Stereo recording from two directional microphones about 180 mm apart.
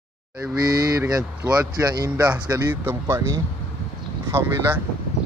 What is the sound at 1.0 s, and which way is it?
Speech, 10° right (ahead or behind).